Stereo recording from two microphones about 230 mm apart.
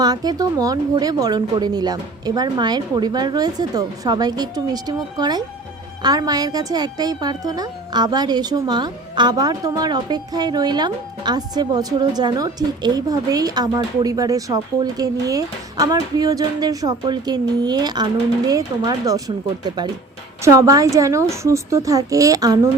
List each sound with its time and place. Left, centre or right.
0.0 s a woman's voice: centre